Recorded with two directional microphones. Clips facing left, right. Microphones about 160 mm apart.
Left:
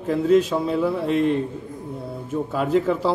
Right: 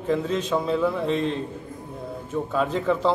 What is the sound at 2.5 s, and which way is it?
Speech, 5° left (ahead or behind).